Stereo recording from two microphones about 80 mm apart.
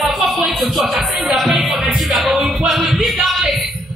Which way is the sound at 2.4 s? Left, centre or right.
Centre.